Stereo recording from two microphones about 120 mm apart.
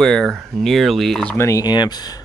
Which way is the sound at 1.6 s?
35° left (ahead or behind).